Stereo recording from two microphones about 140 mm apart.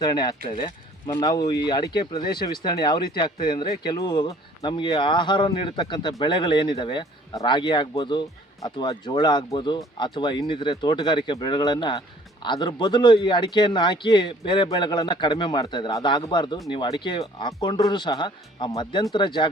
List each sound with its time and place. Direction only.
0.0 s speech: 30° left (ahead or behind)